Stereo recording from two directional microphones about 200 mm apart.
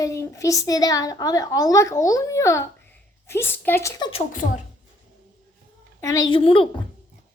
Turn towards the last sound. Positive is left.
turn(degrees=25)  # may be behind; listen again after turning